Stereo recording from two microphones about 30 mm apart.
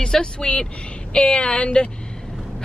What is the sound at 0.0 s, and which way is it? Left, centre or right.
Speech, left.